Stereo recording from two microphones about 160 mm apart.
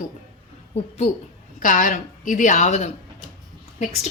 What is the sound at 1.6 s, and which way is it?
A woman's voice, 55° left (ahead or behind).